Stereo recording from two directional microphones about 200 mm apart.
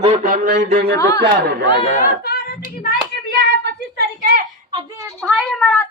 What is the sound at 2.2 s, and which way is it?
Singing, 50° left (ahead or behind).